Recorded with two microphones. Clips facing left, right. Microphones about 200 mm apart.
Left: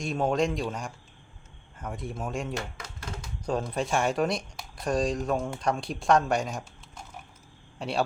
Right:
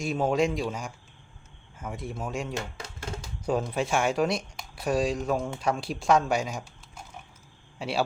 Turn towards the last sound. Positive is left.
turn(degrees=0)  # may be behind; listen again after turning